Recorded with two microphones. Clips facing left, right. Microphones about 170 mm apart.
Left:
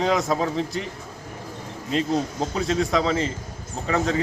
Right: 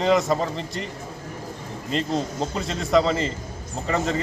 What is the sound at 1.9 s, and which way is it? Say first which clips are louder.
Speech: left 2 dB; 5° left (ahead or behind).